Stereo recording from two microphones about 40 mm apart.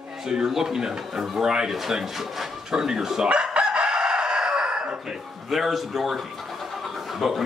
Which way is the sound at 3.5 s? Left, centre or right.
Right.